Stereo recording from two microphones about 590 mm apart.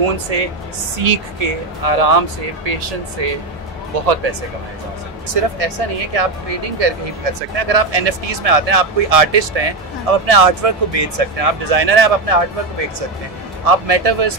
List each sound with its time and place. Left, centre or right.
0.3 s speech: right
5.3 s speech: right
13.7 s speech: right